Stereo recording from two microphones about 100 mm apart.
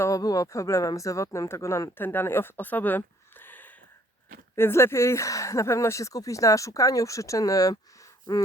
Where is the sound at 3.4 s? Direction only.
20° left (ahead or behind).